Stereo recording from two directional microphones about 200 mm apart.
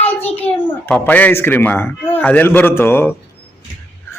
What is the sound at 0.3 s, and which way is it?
A child's voice, 5° left (ahead or behind).